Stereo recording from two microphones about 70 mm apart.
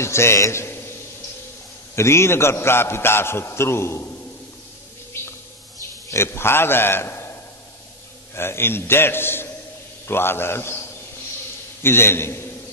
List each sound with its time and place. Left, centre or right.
0.0 s a man's voice: left
2.0 s a man's voice: left
6.1 s a man's voice: left
8.4 s a man's voice: left
11.8 s a man's voice: left